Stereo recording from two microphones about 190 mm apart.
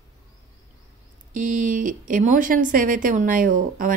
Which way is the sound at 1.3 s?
45° right (ahead or behind).